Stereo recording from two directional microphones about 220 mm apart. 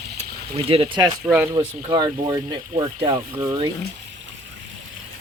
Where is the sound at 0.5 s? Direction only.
25° right (ahead or behind).